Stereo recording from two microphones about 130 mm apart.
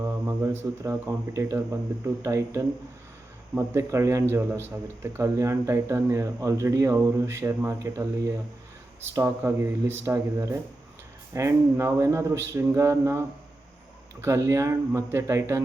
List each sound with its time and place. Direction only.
0.0 s a man's voice: 20° right (ahead or behind)